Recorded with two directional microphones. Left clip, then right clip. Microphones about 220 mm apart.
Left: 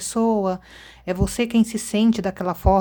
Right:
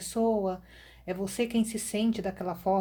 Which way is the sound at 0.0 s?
30° left (ahead or behind).